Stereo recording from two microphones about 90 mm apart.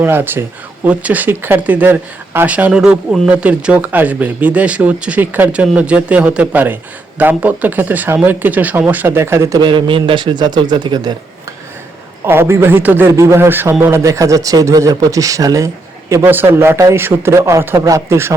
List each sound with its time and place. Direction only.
0.0 s speech: 25° right (ahead or behind)
9.6 s a man's voice: 60° right (ahead or behind)
12.2 s a man's voice: 25° right (ahead or behind)